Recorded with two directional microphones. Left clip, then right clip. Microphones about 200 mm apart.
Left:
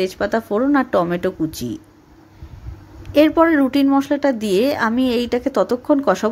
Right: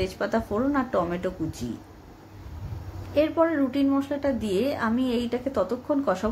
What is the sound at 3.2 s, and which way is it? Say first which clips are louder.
A woman's voice: left 9 dB; 55° left (ahead or behind).